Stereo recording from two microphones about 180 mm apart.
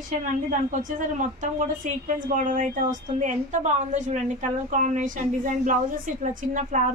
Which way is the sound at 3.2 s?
40° right (ahead or behind).